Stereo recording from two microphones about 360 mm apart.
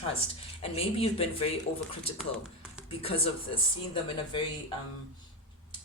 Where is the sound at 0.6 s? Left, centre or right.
Centre.